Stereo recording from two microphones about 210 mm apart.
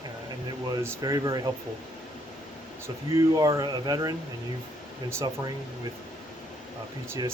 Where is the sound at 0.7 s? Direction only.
15° right (ahead or behind).